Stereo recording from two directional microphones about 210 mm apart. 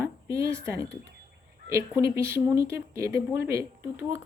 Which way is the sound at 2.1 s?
10° right (ahead or behind).